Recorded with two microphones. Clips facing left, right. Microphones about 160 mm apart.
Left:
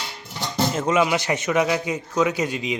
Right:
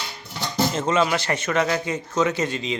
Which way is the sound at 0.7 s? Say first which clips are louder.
Left 2 dB; 10° left (ahead or behind).